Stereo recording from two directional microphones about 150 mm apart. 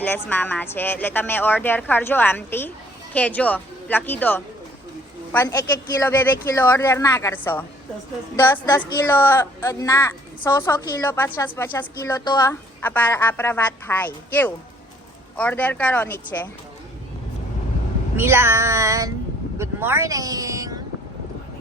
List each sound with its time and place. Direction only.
0.0 s a woman's voice: 15° left (ahead or behind); by 12.5 s 30° left (ahead or behind)
12.5 s a woman's voice: 10° left (ahead or behind)
18.2 s speech: 15° right (ahead or behind)